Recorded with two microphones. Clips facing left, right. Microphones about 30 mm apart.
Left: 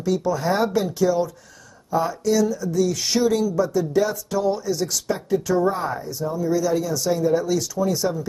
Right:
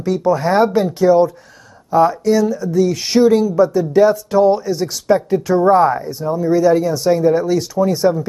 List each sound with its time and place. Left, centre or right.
0.0 s speech: right